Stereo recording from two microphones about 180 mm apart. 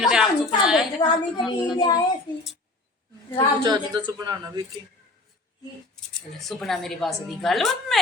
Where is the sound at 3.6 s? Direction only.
25° right (ahead or behind).